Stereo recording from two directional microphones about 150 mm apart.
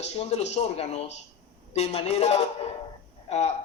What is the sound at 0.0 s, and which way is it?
A man's voice, 45° left (ahead or behind).